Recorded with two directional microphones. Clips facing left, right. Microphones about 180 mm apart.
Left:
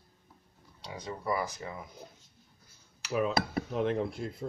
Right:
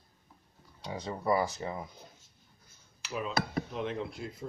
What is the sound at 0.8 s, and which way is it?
Speech, 25° right (ahead or behind).